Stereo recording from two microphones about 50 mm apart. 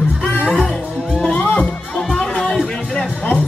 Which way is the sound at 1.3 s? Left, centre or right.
Left.